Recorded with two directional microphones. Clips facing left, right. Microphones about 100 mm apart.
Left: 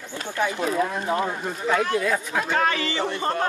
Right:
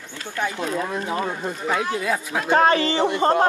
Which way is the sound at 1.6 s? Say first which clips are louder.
Left 2 dB; 10° right (ahead or behind).